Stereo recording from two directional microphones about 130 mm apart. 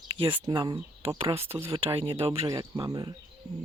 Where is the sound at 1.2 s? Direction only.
50° right (ahead or behind).